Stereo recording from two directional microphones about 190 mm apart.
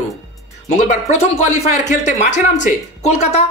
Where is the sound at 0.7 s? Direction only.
40° left (ahead or behind).